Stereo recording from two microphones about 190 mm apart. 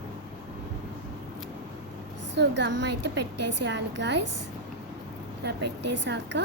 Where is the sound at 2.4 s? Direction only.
65° right (ahead or behind).